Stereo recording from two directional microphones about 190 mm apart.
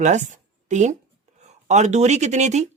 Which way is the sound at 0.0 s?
40° right (ahead or behind).